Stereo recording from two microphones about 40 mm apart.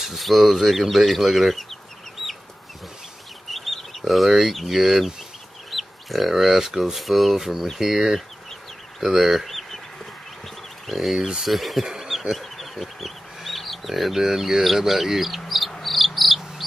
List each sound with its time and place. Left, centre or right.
0.0 s speech: centre
3.5 s bird: centre
4.3 s speech: centre
5.7 s bird: centre
6.9 s speech: centre
10.9 s speech: centre
11.1 s speech: centre
11.5 s speech: centre
11.8 s bee: centre
12.1 s bird: centre
12.4 s bird: centre